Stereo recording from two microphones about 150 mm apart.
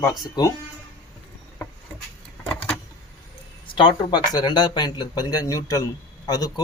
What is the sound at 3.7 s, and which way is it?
Speech, 30° left (ahead or behind).